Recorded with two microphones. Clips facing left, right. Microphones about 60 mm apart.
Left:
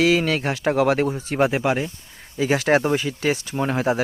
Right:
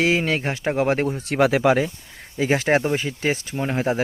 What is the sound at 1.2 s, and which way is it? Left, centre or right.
Speech, right.